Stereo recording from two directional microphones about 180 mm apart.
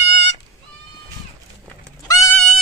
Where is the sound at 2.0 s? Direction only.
20° left (ahead or behind).